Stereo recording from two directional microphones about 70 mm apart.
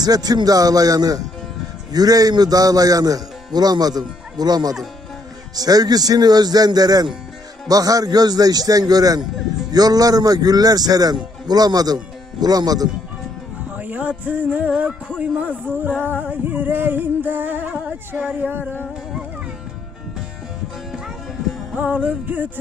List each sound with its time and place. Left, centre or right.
0.0 s a man's voice: right
7.7 s a man's voice: right
13.7 s a sound: right
15.2 s music: right
21.8 s music: right